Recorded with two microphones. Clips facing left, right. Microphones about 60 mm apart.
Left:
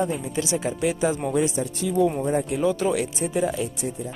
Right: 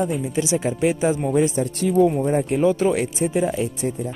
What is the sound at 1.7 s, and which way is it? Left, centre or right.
Speech, right.